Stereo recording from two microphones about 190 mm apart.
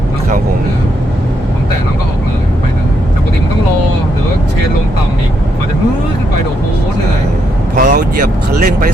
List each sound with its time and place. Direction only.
7.8 s speech: 45° right (ahead or behind)